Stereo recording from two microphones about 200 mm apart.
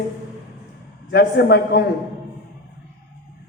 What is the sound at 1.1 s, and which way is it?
Speech, 55° left (ahead or behind).